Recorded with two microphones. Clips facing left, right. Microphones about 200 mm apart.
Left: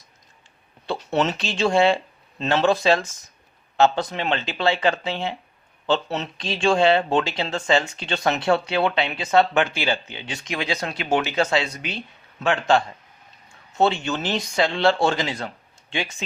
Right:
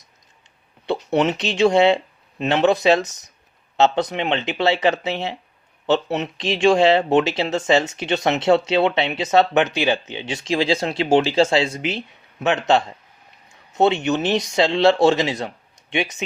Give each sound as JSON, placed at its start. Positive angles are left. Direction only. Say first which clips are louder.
{"t": 0.9, "sound": "speech", "louder": "right 4 dB", "side_deg": -20}